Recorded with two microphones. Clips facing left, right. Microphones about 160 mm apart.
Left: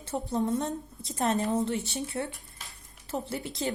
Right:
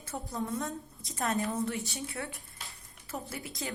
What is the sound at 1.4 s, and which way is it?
A woman's voice, 35° left (ahead or behind).